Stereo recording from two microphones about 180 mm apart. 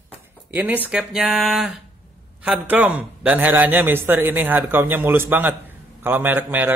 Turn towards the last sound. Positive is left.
turn(degrees=-10)  # may be behind; listen again after turning